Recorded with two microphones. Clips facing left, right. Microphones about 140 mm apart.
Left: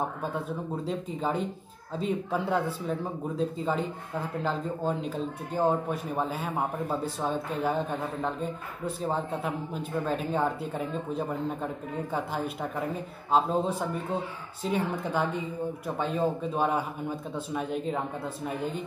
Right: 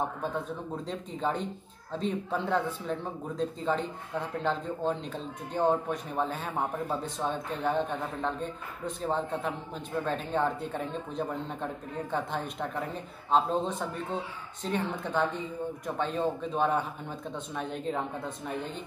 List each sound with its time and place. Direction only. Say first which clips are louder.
0.8 s speech: left 1 dB; 5° left (ahead or behind)